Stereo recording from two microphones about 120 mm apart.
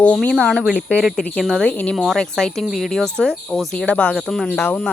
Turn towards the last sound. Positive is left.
turn(degrees=15)  # may be behind; listen again after turning